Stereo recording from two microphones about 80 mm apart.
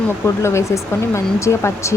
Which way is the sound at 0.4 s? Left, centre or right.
Left.